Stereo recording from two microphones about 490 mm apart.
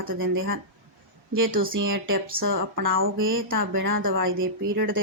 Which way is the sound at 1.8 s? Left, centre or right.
Right.